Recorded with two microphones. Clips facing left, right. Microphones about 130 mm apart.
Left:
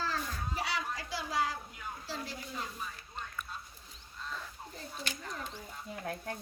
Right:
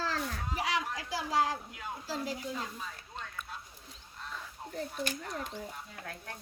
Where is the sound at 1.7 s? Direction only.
90° right.